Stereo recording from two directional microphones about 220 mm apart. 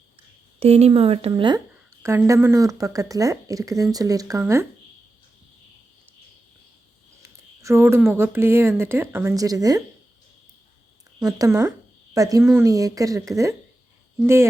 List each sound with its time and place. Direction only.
0.6 s speech: 30° right (ahead or behind)
7.2 s speech: 15° right (ahead or behind)
11.2 s speech: 15° right (ahead or behind)